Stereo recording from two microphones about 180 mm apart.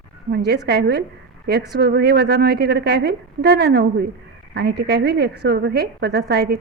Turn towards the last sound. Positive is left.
turn(degrees=-60)  # may be behind; listen again after turning